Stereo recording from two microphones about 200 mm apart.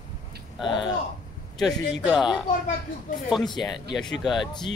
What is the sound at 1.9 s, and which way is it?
Speech, centre (ahead or behind).